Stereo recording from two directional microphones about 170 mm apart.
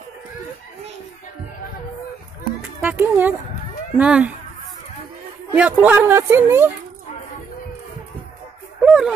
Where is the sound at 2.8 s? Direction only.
10° right (ahead or behind).